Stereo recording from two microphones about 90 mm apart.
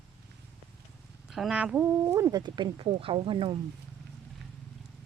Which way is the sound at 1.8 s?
30° right (ahead or behind).